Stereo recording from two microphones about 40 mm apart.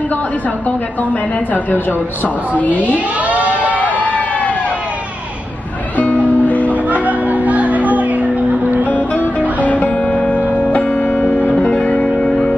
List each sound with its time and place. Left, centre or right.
2.2 s speech: left
2.9 s a sound: right
3.8 s a sound: left
5.9 s music: left
6.7 s music: right
8.8 s music: left
9.9 s music: left
11.1 s music: left
11.5 s music: centre
11.8 s music: left
12.3 s music: left